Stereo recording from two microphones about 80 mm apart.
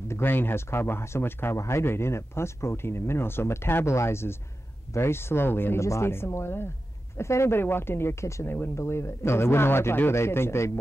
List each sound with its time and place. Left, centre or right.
0.1 s speech: left